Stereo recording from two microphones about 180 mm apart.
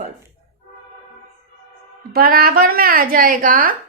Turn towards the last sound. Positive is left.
turn(degrees=-50)  # may be behind; listen again after turning